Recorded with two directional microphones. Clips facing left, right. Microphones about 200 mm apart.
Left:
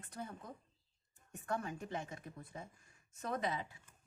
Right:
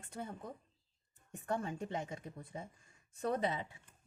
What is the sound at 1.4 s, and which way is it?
Speech, 25° right (ahead or behind).